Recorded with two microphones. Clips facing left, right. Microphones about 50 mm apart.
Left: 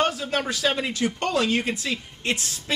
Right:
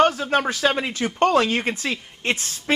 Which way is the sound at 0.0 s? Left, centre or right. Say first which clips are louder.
Right 6 dB; right.